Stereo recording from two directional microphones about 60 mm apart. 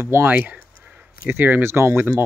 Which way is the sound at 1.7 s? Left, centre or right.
Right.